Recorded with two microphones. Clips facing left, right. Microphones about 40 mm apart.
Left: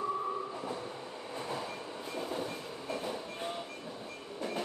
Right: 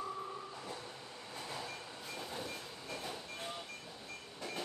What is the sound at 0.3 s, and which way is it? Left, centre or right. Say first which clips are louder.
Train: left 8 dB; left.